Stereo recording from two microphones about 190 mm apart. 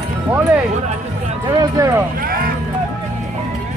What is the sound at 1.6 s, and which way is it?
Speech, 15° right (ahead or behind).